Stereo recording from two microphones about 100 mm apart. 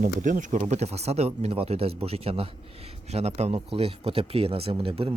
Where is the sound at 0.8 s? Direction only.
90° right.